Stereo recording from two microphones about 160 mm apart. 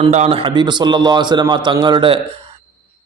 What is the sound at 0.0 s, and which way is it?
A man's voice, 40° right (ahead or behind).